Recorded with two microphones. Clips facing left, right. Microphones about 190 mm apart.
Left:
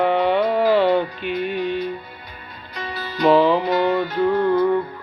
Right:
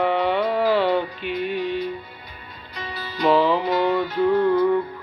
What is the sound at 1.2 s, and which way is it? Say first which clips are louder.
Music: left 2 dB; 50° left (ahead or behind).